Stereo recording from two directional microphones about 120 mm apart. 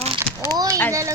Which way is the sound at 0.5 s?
30° right (ahead or behind).